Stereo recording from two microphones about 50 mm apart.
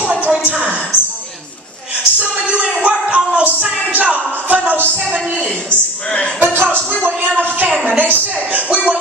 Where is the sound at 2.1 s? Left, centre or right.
Right.